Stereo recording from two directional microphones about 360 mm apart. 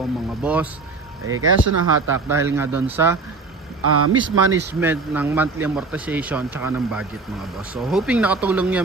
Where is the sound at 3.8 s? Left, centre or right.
Right.